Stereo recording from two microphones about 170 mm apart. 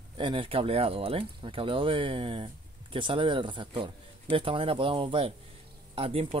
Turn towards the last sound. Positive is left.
turn(degrees=-35)  # may be behind; listen again after turning